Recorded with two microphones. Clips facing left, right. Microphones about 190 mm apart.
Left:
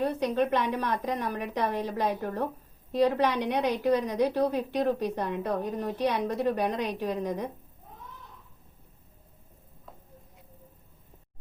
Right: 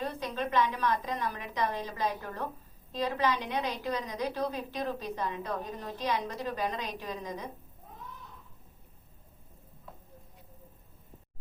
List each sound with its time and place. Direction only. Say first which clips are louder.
0.0 s a woman's voice: left 8 dB; 65° left (ahead or behind)